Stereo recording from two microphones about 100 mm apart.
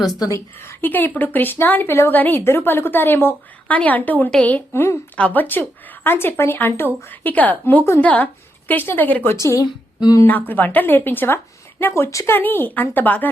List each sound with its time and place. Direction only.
0.2 s a woman's voice: 30° left (ahead or behind)
10.0 s speech: 40° left (ahead or behind)
10.2 s a woman's voice: 15° left (ahead or behind)